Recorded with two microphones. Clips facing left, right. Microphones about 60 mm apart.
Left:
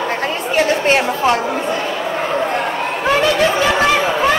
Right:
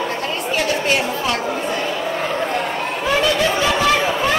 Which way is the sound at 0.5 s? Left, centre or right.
Left.